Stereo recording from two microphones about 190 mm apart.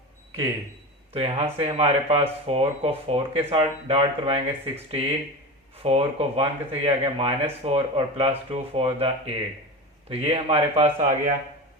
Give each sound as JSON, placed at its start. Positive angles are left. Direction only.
{"t": 1.1, "sound": "speech", "side_deg": -30}